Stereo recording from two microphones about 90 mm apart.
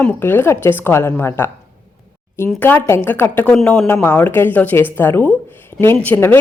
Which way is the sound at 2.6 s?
20° left (ahead or behind).